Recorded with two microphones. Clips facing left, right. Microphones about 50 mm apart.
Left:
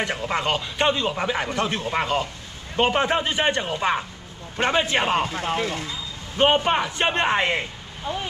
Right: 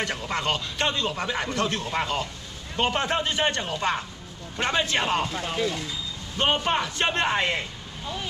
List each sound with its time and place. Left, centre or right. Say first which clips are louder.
0.0 s speech: left 3 dB; centre